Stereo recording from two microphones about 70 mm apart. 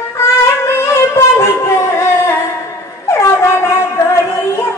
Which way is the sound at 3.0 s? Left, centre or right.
Left.